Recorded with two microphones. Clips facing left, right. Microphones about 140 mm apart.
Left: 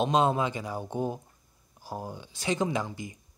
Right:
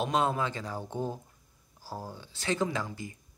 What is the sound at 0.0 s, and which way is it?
Speech, 20° left (ahead or behind).